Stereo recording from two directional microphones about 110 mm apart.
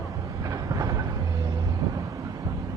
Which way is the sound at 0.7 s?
30° right (ahead or behind).